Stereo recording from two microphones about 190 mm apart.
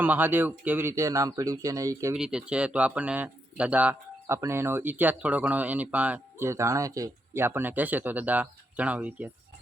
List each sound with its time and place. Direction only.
0.0 s speech: 10° right (ahead or behind)
2.1 s speech: 5° right (ahead or behind)